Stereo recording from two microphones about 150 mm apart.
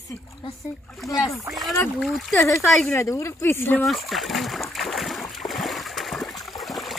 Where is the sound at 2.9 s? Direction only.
20° left (ahead or behind).